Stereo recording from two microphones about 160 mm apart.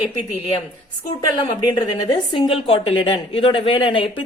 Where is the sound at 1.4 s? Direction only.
25° left (ahead or behind).